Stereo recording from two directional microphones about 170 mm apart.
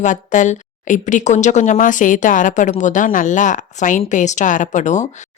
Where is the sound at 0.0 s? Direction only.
45° left (ahead or behind).